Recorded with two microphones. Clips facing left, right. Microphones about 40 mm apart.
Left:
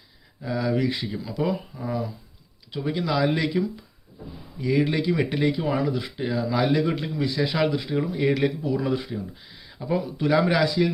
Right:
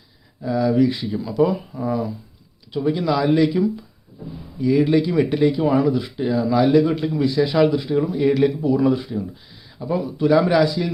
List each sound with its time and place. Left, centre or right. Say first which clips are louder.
0.4 s speech: right 7 dB; left
1.2 s speech: right 9 dB; centre
4.6 s speech: right 6 dB; centre
5.5 s speech: right 7 dB; centre
8.6 s speech: right 8 dB; centre
8.9 s speech: right 6 dB; centre